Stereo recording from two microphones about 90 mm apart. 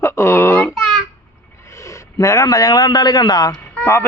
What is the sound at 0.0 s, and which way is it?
Babbling, 30° left (ahead or behind).